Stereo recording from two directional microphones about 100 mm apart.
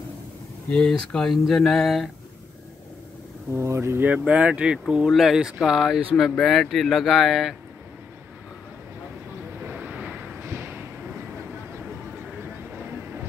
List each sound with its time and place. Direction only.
0.7 s speech: 10° left (ahead or behind)
3.5 s speech: 25° right (ahead or behind)
4.3 s speech: 10° right (ahead or behind)
9.7 s a sound: 15° right (ahead or behind)